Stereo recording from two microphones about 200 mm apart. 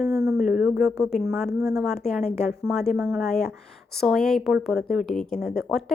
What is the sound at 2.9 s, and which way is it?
A woman's voice, 5° right (ahead or behind).